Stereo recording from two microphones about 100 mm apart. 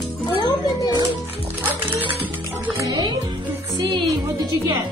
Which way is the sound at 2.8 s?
45° right (ahead or behind).